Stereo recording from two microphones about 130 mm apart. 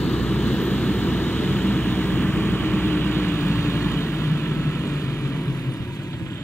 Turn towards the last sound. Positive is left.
turn(degrees=20)  # may be behind; listen again after turning